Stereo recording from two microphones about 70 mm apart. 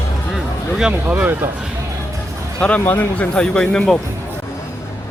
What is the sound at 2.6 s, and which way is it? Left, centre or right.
Speech, left.